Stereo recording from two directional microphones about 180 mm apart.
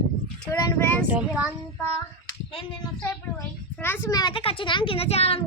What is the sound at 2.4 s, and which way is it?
Speech, 30° left (ahead or behind).